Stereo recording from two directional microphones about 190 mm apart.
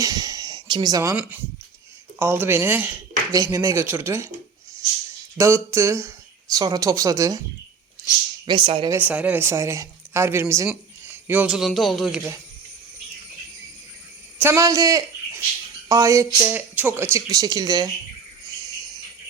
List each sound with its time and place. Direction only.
0.0 s a sound: 20° right (ahead or behind)
2.1 s speech: 10° right (ahead or behind)
5.4 s speech: 15° right (ahead or behind)
8.4 s speech: 25° right (ahead or behind)
8.9 s speech: 10° right (ahead or behind)
14.3 s speech: 15° right (ahead or behind)